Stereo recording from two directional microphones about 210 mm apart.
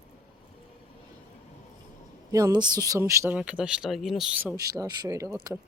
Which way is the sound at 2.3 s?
15° right (ahead or behind).